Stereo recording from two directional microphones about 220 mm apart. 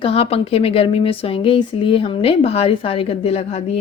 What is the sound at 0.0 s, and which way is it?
Speech, 25° left (ahead or behind).